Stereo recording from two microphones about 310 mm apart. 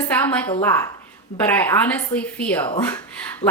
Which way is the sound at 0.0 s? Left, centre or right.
Centre.